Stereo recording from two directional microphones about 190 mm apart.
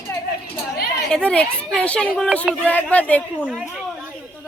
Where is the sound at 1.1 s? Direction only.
5° left (ahead or behind).